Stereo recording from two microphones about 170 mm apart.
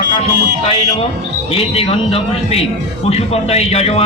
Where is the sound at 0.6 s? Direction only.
35° left (ahead or behind).